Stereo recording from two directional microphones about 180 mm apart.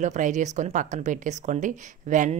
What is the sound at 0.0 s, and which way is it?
Speech, 40° right (ahead or behind).